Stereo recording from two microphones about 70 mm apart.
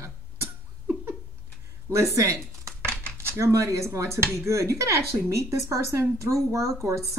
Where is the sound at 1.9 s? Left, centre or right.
Right.